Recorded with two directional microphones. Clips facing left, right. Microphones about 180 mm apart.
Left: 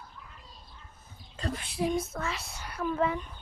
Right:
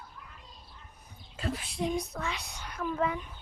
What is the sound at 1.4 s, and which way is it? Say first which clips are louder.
A woman's voice: left 1 dB; centre (ahead or behind).